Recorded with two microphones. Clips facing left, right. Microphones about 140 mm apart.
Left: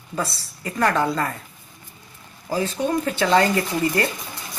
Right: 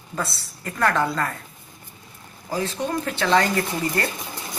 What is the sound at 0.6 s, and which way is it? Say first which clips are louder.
Speech: left 1 dB; 10° left (ahead or behind).